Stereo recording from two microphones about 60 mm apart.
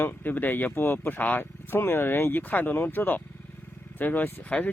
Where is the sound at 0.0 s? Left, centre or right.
Left.